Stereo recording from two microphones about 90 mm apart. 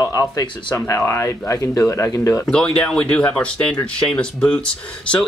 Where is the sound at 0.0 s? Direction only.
40° left (ahead or behind).